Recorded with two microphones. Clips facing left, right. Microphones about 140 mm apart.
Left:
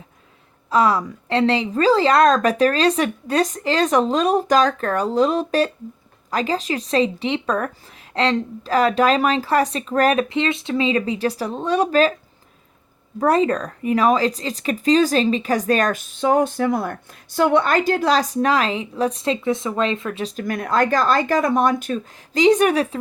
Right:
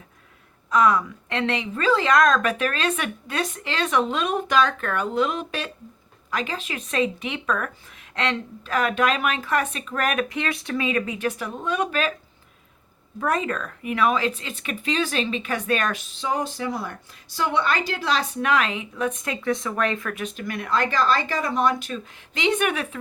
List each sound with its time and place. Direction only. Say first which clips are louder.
0.7 s speech: left 2 dB; 30° left (ahead or behind)
13.1 s speech: left 7 dB; 35° left (ahead or behind)
20.2 s speech: left 5 dB; 40° left (ahead or behind)